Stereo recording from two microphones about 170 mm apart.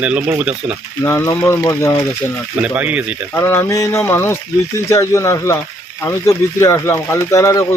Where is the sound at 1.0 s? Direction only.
15° left (ahead or behind).